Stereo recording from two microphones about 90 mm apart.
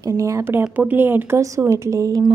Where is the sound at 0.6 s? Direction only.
20° right (ahead or behind).